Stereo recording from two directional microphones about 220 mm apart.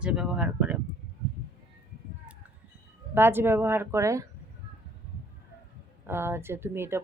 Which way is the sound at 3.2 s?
10° right (ahead or behind).